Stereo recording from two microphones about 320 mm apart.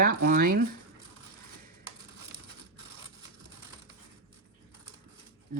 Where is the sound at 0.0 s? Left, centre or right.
Right.